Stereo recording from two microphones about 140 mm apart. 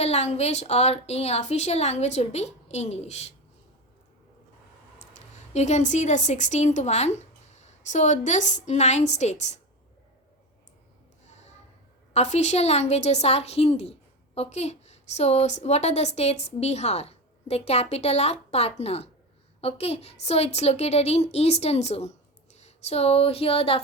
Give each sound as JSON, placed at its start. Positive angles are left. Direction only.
{"t": 0.0, "sound": "a woman's voice", "side_deg": 50}
{"t": 4.9, "sound": "a woman's voice", "side_deg": 55}
{"t": 12.1, "sound": "a woman's voice", "side_deg": 55}